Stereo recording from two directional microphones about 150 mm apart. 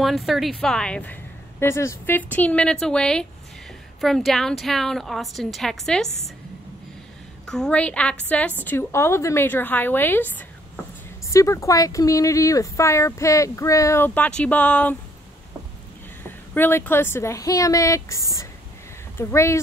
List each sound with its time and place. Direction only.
0.0 s a woman's voice: centre (ahead or behind)
1.6 s a woman's voice: 20° left (ahead or behind); by 6.0 s 5° left (ahead or behind)
7.4 s a woman's voice: 5° left (ahead or behind)
16.3 s speech: 15° left (ahead or behind)